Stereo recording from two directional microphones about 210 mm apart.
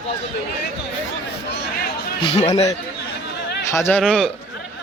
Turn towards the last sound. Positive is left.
turn(degrees=0)  # may be behind; listen again after turning